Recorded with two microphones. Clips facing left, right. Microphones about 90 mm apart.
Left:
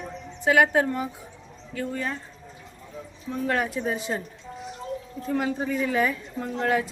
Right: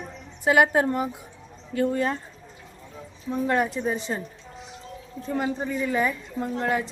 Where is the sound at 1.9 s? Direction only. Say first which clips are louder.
Right 4 dB; 30° right (ahead or behind).